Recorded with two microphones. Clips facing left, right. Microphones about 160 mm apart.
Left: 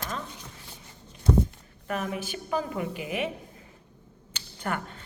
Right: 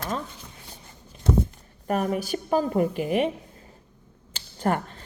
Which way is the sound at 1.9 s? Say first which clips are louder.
Right 6 dB; 40° right (ahead or behind).